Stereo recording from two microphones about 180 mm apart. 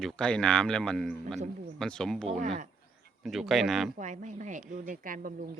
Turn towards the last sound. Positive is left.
turn(degrees=-50)  # may be behind; listen again after turning